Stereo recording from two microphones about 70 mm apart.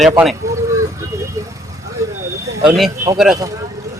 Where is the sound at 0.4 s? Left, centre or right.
Right.